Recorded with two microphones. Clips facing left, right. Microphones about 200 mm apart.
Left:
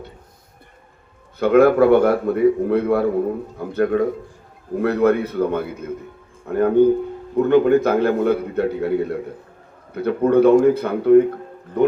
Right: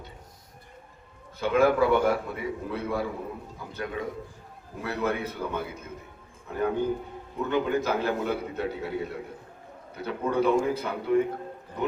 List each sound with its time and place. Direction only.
1.4 s a man's voice: 60° left (ahead or behind)